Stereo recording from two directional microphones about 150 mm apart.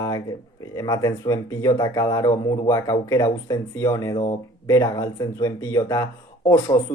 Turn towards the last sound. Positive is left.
turn(degrees=20)  # may be behind; listen again after turning